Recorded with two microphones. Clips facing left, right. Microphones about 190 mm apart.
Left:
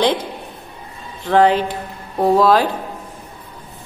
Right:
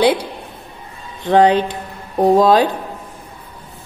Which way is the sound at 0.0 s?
10° right (ahead or behind).